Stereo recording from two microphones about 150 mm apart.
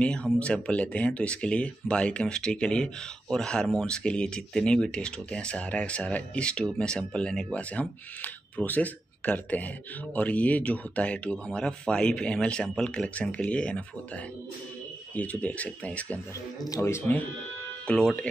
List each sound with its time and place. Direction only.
0.0 s speech: 5° left (ahead or behind)
16.6 s speech: 20° left (ahead or behind)
17.8 s speech: 5° left (ahead or behind)